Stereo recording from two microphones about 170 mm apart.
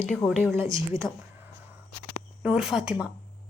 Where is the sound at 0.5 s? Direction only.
20° right (ahead or behind).